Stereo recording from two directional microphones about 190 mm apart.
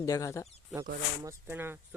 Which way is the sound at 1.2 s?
15° right (ahead or behind).